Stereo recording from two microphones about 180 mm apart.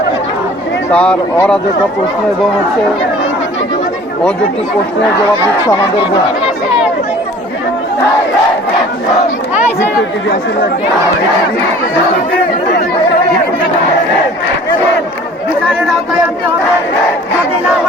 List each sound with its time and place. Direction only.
0.9 s speech: 5° left (ahead or behind)
9.8 s speech: 75° left (ahead or behind)